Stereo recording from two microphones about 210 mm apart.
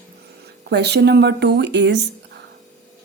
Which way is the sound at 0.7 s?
50° right (ahead or behind).